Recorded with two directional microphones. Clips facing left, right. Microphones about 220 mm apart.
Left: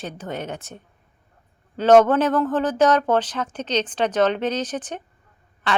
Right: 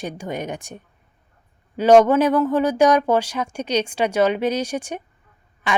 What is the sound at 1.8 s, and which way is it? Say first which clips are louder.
A woman's voice: right 1 dB; 10° right (ahead or behind).